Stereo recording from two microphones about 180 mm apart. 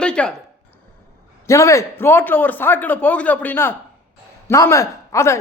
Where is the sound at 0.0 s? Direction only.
5° left (ahead or behind).